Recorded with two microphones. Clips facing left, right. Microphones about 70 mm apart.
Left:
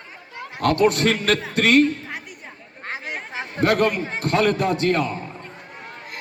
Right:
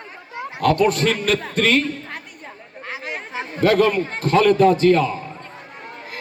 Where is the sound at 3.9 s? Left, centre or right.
Centre.